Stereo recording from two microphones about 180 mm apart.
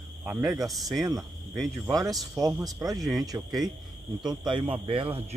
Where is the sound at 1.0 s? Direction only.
20° right (ahead or behind).